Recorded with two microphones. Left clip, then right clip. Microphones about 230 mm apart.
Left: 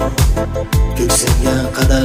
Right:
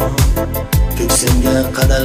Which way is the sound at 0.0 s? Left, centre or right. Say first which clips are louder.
Even; centre.